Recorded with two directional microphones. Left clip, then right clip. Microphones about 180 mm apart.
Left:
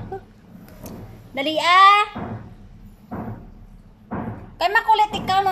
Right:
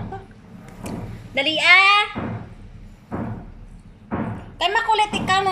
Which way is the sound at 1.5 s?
10° left (ahead or behind).